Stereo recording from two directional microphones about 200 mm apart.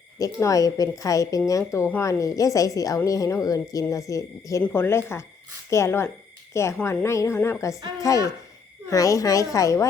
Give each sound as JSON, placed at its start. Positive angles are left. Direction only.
{"t": 0.2, "sound": "a woman's voice", "side_deg": 15}